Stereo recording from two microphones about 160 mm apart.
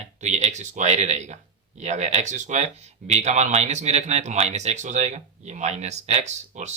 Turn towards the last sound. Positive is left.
turn(degrees=-45)  # may be behind; listen again after turning